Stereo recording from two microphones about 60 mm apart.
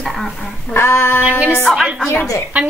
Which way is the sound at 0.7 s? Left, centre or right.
Left.